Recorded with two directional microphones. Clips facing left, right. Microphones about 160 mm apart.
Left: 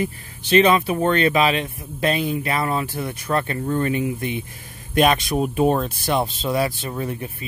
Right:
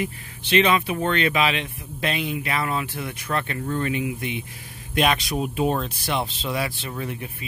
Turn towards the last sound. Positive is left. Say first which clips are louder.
# left 4 dB
turn(degrees=40)  # may be behind; listen again after turning